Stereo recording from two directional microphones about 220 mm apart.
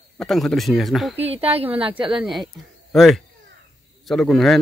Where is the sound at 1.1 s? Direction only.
25° right (ahead or behind).